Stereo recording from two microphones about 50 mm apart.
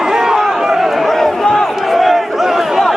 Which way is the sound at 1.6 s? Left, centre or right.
Centre.